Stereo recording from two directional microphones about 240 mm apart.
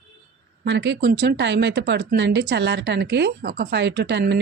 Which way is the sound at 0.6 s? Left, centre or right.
Right.